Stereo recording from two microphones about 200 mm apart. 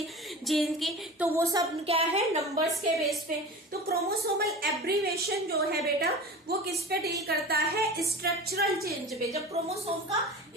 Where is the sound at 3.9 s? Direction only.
50° right (ahead or behind).